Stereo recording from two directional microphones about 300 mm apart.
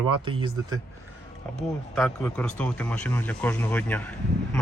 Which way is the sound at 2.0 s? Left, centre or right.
Centre.